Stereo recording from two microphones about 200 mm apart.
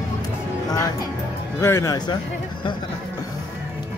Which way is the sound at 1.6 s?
15° left (ahead or behind).